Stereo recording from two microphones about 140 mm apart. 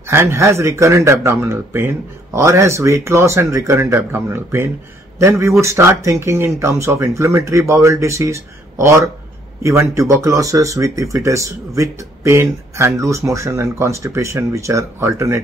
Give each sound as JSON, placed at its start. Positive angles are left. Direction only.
{"t": 0.0, "sound": "speech", "side_deg": -20}